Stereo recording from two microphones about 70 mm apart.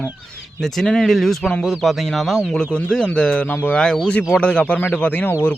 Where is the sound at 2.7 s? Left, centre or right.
Centre.